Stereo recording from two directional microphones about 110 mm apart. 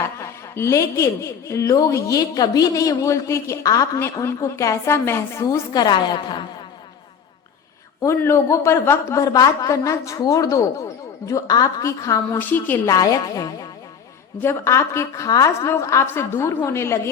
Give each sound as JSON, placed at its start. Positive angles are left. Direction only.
{"t": 0.0, "sound": "speech", "side_deg": 25}
{"t": 5.7, "sound": "speech", "side_deg": 40}
{"t": 8.0, "sound": "speech", "side_deg": 25}
{"t": 12.4, "sound": "a woman's voice", "side_deg": 15}
{"t": 12.9, "sound": "speech", "side_deg": 30}